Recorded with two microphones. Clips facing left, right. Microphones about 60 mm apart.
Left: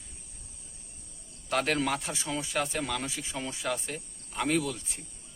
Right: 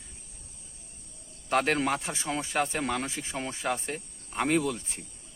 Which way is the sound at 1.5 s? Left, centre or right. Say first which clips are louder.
Right 2 dB; right.